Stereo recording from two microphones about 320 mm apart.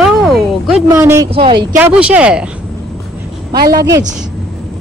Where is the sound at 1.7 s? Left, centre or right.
Centre.